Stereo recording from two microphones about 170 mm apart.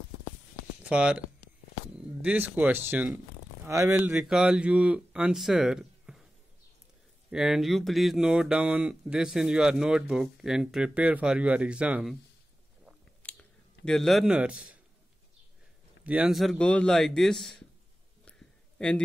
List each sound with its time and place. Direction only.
0.8 s speech: 5° right (ahead or behind)
7.2 s speech: centre (ahead or behind)
13.2 s a sound: 5° left (ahead or behind)
16.0 s speech: 5° right (ahead or behind)
18.8 s a man's voice: 5° left (ahead or behind)